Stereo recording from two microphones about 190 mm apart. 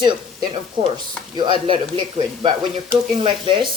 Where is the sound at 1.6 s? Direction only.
25° right (ahead or behind).